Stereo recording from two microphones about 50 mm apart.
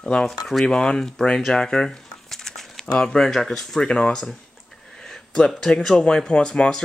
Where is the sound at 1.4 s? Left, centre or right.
Centre.